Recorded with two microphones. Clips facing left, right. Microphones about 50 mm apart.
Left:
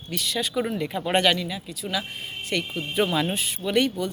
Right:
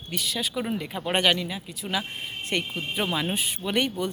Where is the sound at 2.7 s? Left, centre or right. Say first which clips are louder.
Left 4 dB; centre.